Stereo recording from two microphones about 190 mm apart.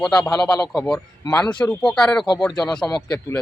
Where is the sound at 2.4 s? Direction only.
20° left (ahead or behind).